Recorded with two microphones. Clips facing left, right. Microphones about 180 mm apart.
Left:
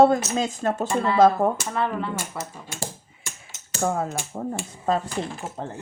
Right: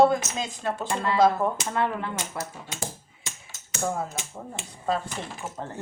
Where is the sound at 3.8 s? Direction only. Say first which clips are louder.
Left 4 dB; 55° left (ahead or behind).